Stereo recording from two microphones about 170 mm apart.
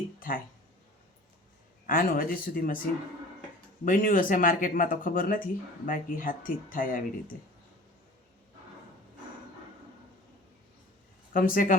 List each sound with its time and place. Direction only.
0.2 s a sound: 55° left (ahead or behind)
1.9 s speech: 55° left (ahead or behind)
3.8 s speech: 55° left (ahead or behind)
11.3 s speech: 55° left (ahead or behind)